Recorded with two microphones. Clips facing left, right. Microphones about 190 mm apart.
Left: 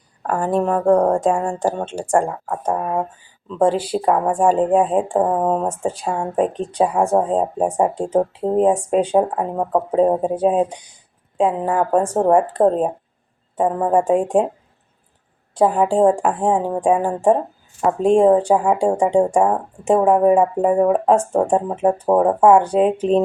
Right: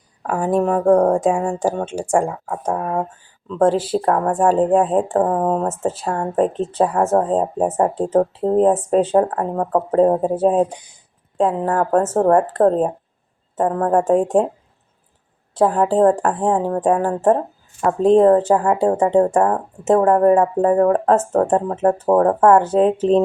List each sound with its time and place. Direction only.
0.2 s speech: 5° right (ahead or behind)
2.2 s speech: 5° left (ahead or behind)
3.7 s speech: 5° right (ahead or behind)
4.0 s speech: 10° left (ahead or behind)
5.9 s speech: 5° right (ahead or behind)
6.1 s speech: 10° left (ahead or behind)
8.4 s speech: centre (ahead or behind)
9.0 s speech: centre (ahead or behind)
10.2 s speech: 5° right (ahead or behind)
11.3 s speech: 10° left (ahead or behind)
15.5 s speech: 5° left (ahead or behind)